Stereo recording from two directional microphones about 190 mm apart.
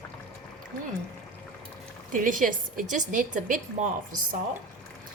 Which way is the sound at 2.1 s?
45° right (ahead or behind).